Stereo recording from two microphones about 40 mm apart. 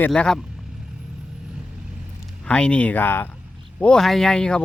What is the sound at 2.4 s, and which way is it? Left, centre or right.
Speech, left.